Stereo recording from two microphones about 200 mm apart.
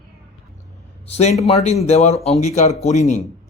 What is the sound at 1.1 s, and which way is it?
Speech, 35° left (ahead or behind).